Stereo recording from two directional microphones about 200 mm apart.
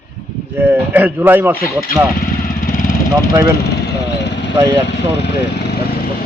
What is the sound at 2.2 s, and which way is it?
Vehicle, 45° left (ahead or behind).